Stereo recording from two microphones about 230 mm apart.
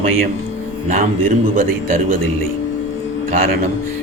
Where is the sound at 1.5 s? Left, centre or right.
Right.